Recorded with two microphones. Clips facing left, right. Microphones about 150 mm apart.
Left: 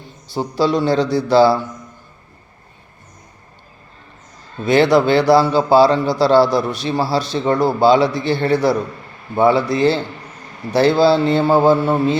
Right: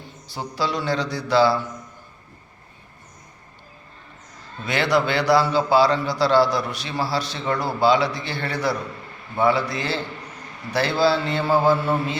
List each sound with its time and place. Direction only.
0.3 s speech: 30° left (ahead or behind)
4.6 s a man's voice: 30° left (ahead or behind)